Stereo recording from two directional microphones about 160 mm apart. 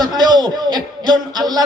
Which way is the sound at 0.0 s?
25° right (ahead or behind).